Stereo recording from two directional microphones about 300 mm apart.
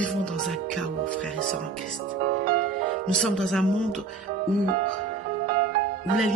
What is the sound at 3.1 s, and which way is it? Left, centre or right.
Speech, centre.